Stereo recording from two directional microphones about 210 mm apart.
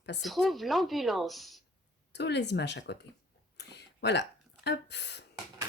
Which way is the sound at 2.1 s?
55° left (ahead or behind).